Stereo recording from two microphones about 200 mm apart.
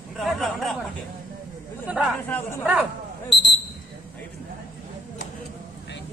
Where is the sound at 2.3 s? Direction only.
10° left (ahead or behind).